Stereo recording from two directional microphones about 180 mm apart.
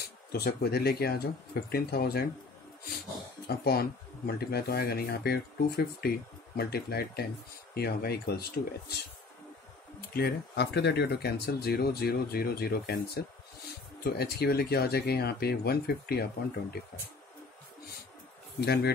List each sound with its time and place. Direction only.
0.3 s speech: 60° left (ahead or behind)
3.4 s speech: 60° left (ahead or behind)
10.1 s speech: 60° left (ahead or behind)
18.6 s speech: 65° left (ahead or behind)